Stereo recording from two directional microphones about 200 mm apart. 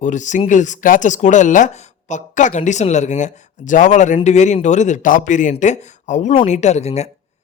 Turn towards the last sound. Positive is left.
turn(degrees=35)  # may be behind; listen again after turning